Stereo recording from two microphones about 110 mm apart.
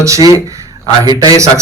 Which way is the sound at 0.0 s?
30° right (ahead or behind).